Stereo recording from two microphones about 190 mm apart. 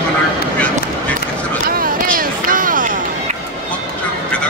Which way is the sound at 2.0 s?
45° right (ahead or behind).